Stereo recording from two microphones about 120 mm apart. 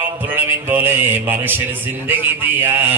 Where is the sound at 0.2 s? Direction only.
15° right (ahead or behind).